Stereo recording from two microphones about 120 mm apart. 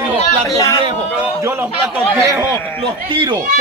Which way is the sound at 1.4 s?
20° right (ahead or behind).